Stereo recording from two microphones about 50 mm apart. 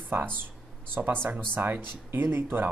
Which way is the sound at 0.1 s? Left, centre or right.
Right.